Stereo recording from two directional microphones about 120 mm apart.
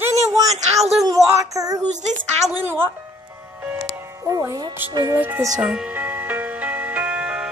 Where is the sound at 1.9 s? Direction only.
80° right.